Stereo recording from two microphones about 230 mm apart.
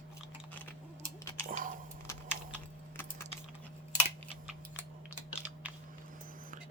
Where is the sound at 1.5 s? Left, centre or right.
Right.